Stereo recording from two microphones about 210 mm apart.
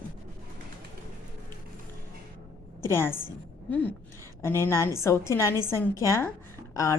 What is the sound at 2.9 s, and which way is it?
Speech, 10° left (ahead or behind).